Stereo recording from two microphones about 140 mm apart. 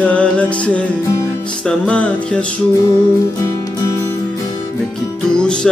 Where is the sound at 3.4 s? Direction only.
25° left (ahead or behind).